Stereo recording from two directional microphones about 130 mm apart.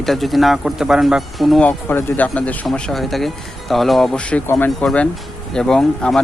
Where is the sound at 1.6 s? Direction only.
10° left (ahead or behind).